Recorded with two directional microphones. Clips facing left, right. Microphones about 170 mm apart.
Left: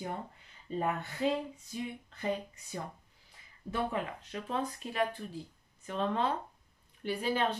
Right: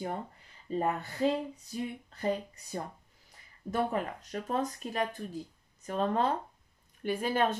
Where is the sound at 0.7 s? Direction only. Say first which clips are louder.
Right 2 dB; 40° right (ahead or behind).